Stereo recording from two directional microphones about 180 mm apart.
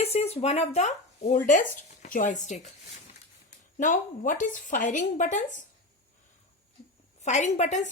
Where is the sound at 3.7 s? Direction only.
45° left (ahead or behind).